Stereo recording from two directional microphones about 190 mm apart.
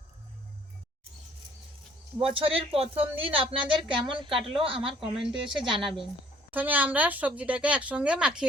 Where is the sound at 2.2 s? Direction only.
30° right (ahead or behind).